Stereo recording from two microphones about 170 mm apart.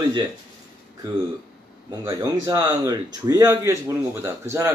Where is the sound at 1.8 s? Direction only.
25° right (ahead or behind).